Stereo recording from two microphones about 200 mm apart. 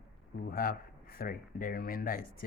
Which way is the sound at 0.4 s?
45° left (ahead or behind).